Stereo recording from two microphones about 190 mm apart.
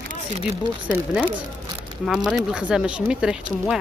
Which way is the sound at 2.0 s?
Centre (ahead or behind).